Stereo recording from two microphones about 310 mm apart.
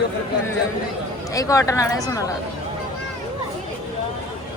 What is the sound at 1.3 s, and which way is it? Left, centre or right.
Speech, centre.